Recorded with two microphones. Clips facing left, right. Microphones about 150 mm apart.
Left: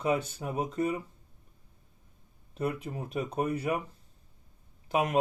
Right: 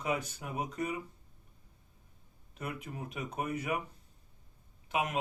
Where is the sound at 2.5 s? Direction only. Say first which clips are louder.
Left 8 dB; 30° left (ahead or behind).